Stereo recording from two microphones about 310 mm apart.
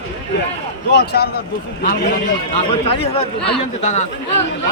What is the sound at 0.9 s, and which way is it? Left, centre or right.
Speech, left.